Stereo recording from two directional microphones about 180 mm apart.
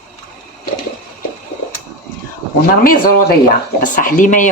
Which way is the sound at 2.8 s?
50° left (ahead or behind).